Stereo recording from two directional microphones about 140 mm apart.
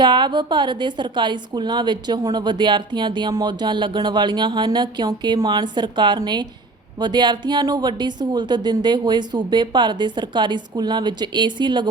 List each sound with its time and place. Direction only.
0.0 s a woman's voice: 30° right (ahead or behind)